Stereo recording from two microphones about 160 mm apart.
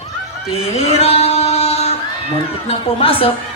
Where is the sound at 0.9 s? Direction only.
40° left (ahead or behind).